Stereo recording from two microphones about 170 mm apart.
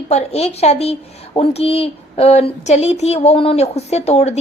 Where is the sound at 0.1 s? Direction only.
40° left (ahead or behind).